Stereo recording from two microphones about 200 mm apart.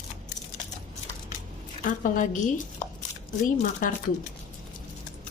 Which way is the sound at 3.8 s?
45° left (ahead or behind).